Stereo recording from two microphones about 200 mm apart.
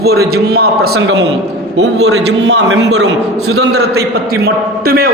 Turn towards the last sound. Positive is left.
turn(degrees=-50)  # may be behind; listen again after turning